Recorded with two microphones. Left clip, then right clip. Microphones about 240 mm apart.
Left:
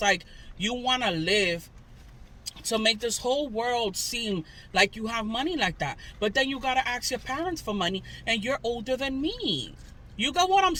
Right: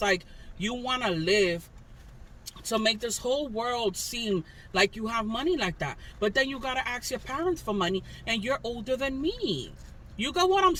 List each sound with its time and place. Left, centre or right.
0.0 s speech: centre